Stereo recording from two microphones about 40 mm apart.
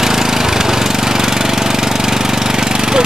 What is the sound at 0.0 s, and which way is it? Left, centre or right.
Engine, centre.